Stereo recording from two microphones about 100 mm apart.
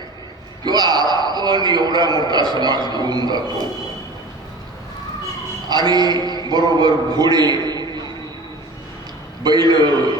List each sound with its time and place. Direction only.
0.6 s a man's voice: 45° right (ahead or behind)
5.6 s a man's voice: 45° right (ahead or behind)
9.4 s a man's voice: 45° right (ahead or behind)